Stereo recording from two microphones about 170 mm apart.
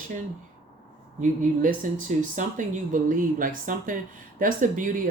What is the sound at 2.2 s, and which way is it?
Speech, 50° right (ahead or behind).